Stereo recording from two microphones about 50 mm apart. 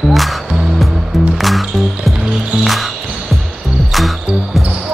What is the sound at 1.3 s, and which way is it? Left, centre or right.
Music, centre.